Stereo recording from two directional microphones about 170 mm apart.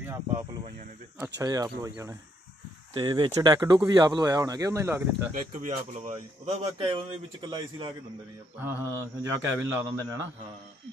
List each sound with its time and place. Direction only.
0.0 s snake: 15° right (ahead or behind)
1.4 s speech: 20° right (ahead or behind)
5.3 s speech: 50° right (ahead or behind); by 7.9 s 30° right (ahead or behind)
8.5 s a man's voice: 10° right (ahead or behind)